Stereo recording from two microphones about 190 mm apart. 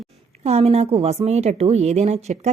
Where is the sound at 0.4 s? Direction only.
35° right (ahead or behind).